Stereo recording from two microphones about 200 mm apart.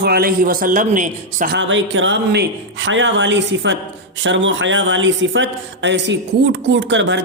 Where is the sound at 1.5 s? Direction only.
70° right (ahead or behind).